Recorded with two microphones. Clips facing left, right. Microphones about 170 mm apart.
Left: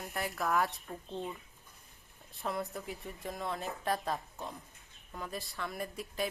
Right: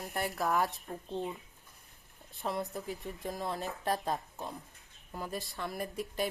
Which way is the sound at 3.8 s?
30° right (ahead or behind).